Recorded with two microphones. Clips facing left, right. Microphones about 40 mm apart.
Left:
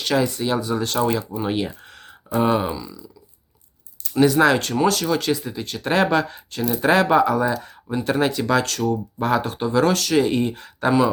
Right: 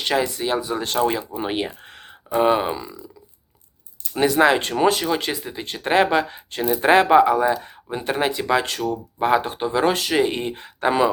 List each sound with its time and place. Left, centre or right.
0.0 s speech: right
2.7 s speech: right
4.1 s speech: right